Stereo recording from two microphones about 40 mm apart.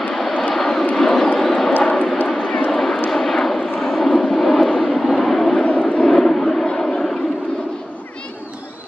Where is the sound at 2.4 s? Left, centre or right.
Left.